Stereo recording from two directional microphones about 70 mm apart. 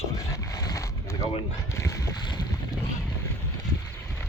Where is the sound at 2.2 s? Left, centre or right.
Left.